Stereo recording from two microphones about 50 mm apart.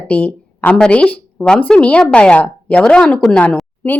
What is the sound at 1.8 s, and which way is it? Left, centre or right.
A woman's voice, left.